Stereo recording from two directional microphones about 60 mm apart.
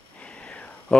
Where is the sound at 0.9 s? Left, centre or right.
Centre.